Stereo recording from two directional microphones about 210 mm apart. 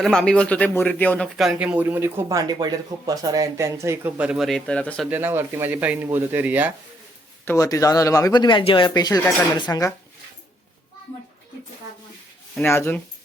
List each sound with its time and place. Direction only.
0.0 s speech: 5° left (ahead or behind)
5.0 s speech: 10° right (ahead or behind)
7.4 s speech: 15° left (ahead or behind)
12.5 s speech: 10° left (ahead or behind)